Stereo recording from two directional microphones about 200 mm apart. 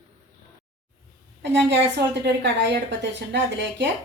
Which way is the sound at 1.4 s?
60° right (ahead or behind).